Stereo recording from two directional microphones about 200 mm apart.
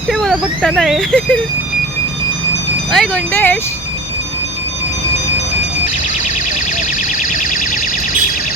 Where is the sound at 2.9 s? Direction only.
5° left (ahead or behind).